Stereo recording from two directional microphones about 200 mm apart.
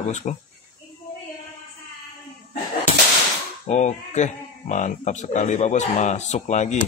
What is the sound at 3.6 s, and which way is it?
Speech, 35° left (ahead or behind).